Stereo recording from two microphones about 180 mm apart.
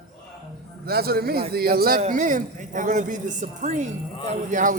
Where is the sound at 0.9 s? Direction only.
60° right (ahead or behind).